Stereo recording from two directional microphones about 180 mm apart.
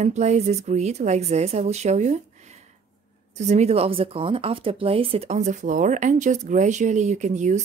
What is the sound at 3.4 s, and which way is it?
A woman's voice, 40° right (ahead or behind).